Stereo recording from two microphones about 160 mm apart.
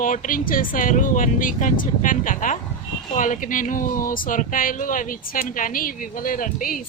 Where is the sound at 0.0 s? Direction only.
55° left (ahead or behind).